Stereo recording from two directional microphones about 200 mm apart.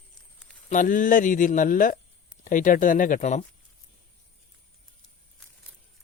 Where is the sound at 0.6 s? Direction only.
40° left (ahead or behind).